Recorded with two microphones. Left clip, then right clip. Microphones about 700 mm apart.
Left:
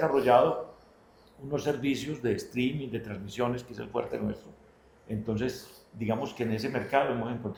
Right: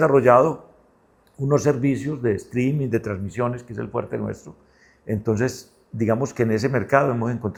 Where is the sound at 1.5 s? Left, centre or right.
Right.